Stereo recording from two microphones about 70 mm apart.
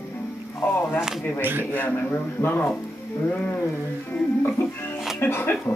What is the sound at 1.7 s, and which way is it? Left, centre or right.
Speech, left.